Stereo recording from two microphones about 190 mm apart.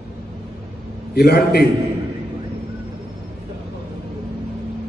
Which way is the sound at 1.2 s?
55° left (ahead or behind).